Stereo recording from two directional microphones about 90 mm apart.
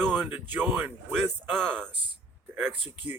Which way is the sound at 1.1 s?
5° left (ahead or behind).